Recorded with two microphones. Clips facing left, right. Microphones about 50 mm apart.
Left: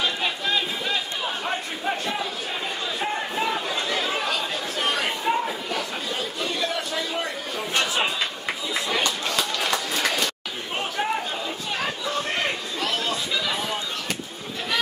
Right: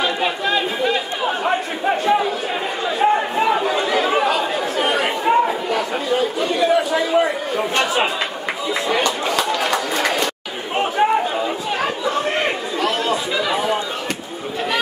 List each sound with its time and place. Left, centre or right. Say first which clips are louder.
0.0 s chatter: right 6 dB; centre
8.8 s a sound: right 6 dB; right
9.5 s chatter: right 6 dB; centre
9.9 s bird: right 5 dB; right
10.8 s chatter: right 10 dB; right